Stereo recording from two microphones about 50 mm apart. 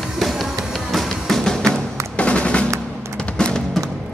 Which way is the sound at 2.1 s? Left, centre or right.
Left.